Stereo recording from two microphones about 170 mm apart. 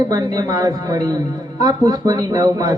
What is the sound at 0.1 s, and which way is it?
A man's voice, 25° right (ahead or behind).